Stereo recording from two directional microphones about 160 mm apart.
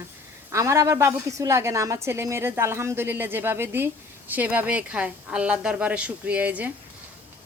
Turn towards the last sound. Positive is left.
turn(degrees=-10)  # may be behind; listen again after turning